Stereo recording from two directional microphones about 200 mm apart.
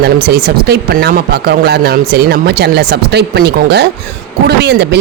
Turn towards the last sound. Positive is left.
turn(degrees=-55)  # may be behind; listen again after turning